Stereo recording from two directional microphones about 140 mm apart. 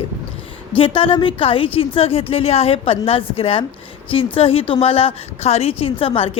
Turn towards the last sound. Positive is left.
turn(degrees=45)  # may be behind; listen again after turning